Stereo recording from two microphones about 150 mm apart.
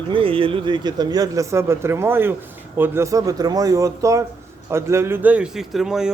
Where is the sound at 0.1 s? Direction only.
35° right (ahead or behind).